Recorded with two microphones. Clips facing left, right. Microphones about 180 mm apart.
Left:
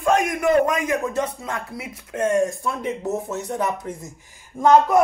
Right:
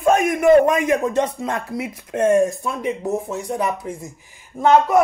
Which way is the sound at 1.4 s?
65° right (ahead or behind).